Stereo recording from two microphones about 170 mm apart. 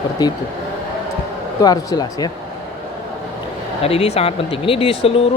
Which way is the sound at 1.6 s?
20° left (ahead or behind).